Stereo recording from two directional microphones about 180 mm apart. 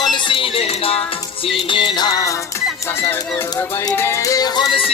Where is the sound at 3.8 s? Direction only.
15° left (ahead or behind).